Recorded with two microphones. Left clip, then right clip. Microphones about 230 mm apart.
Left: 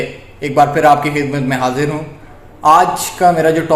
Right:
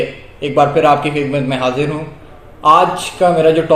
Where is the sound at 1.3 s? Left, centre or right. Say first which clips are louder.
Even; left.